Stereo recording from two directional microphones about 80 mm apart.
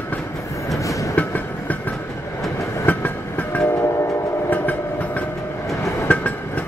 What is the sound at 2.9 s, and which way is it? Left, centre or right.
Train, left.